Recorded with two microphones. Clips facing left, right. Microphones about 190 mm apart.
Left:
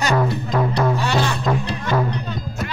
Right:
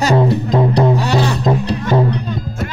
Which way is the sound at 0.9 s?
40° right (ahead or behind).